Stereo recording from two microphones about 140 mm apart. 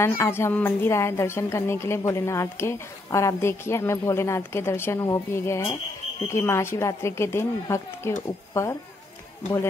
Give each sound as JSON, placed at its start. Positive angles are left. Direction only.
{"t": 0.0, "sound": "a woman's voice", "side_deg": 20}